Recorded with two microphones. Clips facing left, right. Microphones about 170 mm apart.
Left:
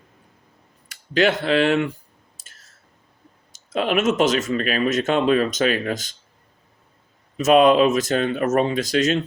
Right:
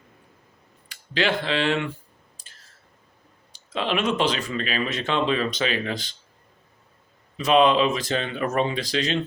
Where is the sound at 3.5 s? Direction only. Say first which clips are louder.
Left 4 dB; 45° left (ahead or behind).